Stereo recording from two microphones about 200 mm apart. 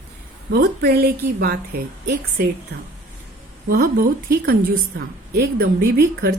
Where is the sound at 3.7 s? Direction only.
50° right (ahead or behind).